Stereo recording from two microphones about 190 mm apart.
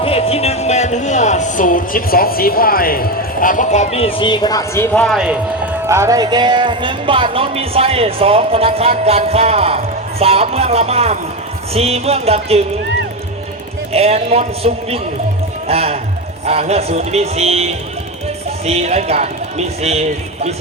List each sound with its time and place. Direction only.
0.0 s speech: 30° left (ahead or behind); by 5.0 s 15° left (ahead or behind)
5.0 s a man's voice: 5° right (ahead or behind)
5.9 s speech: 15° right (ahead or behind); by 12.6 s 30° right (ahead or behind)
13.9 s a man's voice: 30° right (ahead or behind)